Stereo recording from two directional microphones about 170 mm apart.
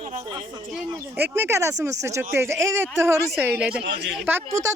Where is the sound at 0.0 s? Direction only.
45° right (ahead or behind).